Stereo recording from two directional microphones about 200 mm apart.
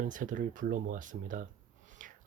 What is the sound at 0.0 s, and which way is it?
Speech, 40° right (ahead or behind).